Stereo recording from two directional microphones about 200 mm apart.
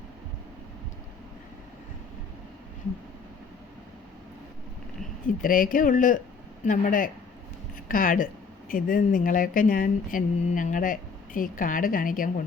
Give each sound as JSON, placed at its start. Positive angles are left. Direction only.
{"t": 5.4, "sound": "speech", "side_deg": 45}